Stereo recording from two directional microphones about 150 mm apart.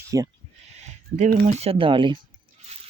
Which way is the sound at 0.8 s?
50° right (ahead or behind).